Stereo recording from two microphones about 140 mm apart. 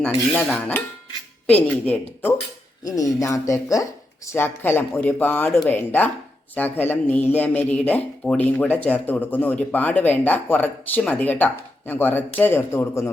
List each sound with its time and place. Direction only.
0.3 s a man's voice: 10° left (ahead or behind)
2.8 s a man's voice: 25° left (ahead or behind)